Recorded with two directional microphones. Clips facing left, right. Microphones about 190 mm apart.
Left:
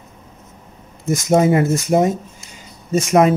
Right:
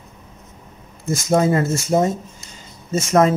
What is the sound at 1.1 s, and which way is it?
Speech, 20° left (ahead or behind).